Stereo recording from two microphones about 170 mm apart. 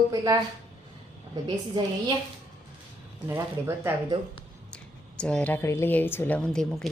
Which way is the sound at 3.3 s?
15° right (ahead or behind).